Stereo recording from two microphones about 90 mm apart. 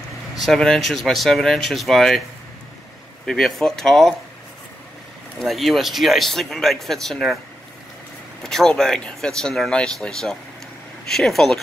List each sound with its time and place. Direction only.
0.4 s speech: 5° left (ahead or behind)
3.3 s speech: centre (ahead or behind)
5.4 s speech: centre (ahead or behind)
8.5 s speech: 5° left (ahead or behind)